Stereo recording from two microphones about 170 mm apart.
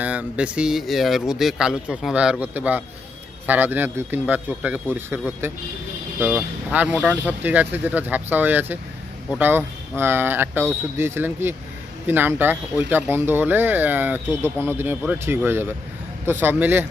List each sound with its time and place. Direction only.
0.0 s a man's voice: 10° right (ahead or behind)